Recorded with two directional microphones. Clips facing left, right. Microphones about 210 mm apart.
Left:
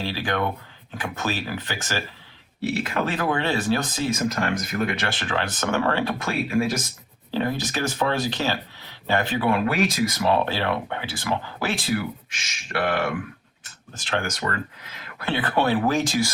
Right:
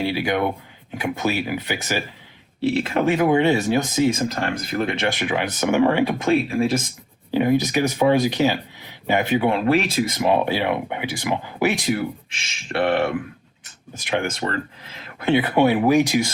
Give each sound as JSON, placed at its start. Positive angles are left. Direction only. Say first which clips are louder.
{"t": 0.0, "sound": "speech", "louder": "right 5 dB", "side_deg": -15}
{"t": 2.7, "sound": "speech", "louder": "right 6 dB", "side_deg": -25}
{"t": 4.3, "sound": "speech", "louder": "even", "side_deg": -30}
{"t": 5.1, "sound": "speech", "louder": "right 4 dB", "side_deg": -15}
{"t": 6.3, "sound": "speech", "louder": "right 2 dB", "side_deg": -30}
{"t": 7.3, "sound": "speech", "louder": "right 7 dB", "side_deg": -15}
{"t": 9.6, "sound": "speech", "louder": "right 3 dB", "side_deg": -30}
{"t": 11.9, "sound": "speech", "louder": "right 2 dB", "side_deg": -30}
{"t": 14.0, "sound": "speech", "louder": "right 4 dB", "side_deg": -15}
{"t": 14.3, "sound": "speech", "louder": "right 3 dB", "side_deg": -30}
{"t": 15.3, "sound": "speech", "louder": "right 5 dB", "side_deg": -15}